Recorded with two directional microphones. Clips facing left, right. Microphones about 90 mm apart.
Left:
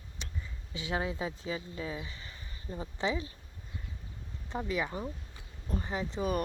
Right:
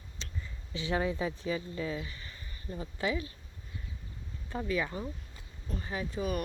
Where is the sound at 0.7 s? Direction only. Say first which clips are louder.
Right 3 dB; 15° left (ahead or behind).